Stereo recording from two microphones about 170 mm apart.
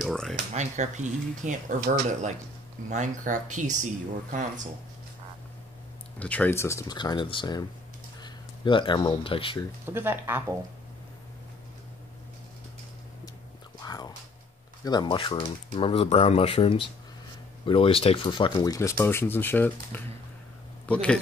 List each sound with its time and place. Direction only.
0.0 s a sound: centre (ahead or behind)
0.5 s speech: 45° right (ahead or behind)
6.1 s speech: 10° left (ahead or behind); by 9.6 s 30° left (ahead or behind)
9.8 s speech: 15° right (ahead or behind)
13.7 s whispering: 25° left (ahead or behind)
14.9 s speech: 25° left (ahead or behind); by 21.2 s 5° left (ahead or behind)